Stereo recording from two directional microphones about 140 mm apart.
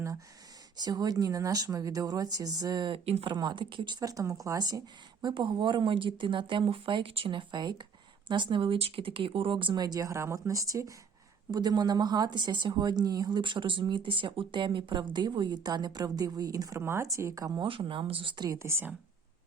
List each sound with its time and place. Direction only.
0.8 s speech: 30° right (ahead or behind)
17.6 s speech: 40° right (ahead or behind); by 18.9 s 15° right (ahead or behind)